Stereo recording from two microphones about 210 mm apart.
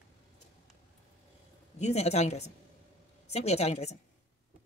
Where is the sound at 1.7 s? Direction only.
30° left (ahead or behind).